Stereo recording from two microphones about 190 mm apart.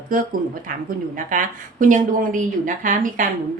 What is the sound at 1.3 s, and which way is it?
A woman's voice, 45° right (ahead or behind).